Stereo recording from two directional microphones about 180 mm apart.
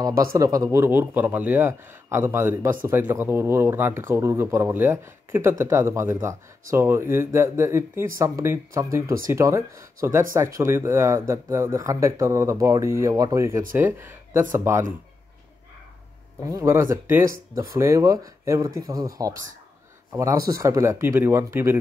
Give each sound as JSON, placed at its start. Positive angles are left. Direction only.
{"t": 0.3, "sound": "speech", "side_deg": -20}
{"t": 16.4, "sound": "speech", "side_deg": -15}